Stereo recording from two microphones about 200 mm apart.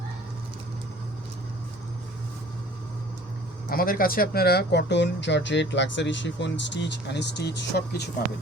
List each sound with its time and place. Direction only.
3.7 s speech: 45° left (ahead or behind)